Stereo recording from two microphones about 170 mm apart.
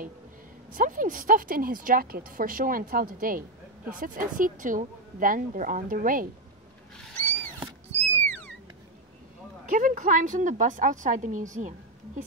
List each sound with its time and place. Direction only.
0.7 s a woman's voice: 50° right (ahead or behind)
8.2 s cat: 10° left (ahead or behind)
9.7 s a woman's voice: 55° right (ahead or behind)